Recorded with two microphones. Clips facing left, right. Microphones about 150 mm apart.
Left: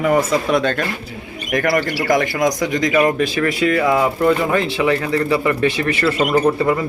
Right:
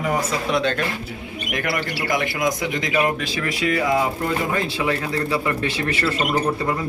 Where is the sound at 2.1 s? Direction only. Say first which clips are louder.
Left 6 dB; 45° left (ahead or behind); by 6.1 s 70° left (ahead or behind).